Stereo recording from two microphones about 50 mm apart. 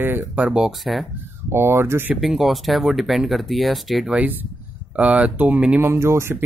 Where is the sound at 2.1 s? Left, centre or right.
Centre.